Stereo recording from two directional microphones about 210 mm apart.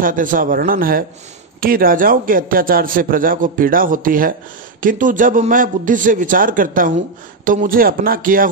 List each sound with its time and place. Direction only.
0.0 s a man's voice: 40° right (ahead or behind)